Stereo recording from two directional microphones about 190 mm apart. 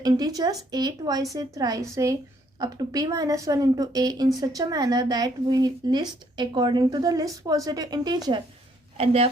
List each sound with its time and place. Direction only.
0.0 s a woman's voice: 20° right (ahead or behind)